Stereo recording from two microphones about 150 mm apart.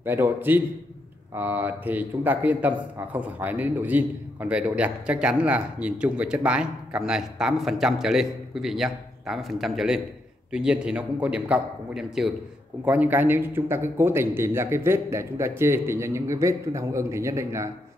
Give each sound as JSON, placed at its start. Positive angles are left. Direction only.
{"t": 0.0, "sound": "speech", "side_deg": -15}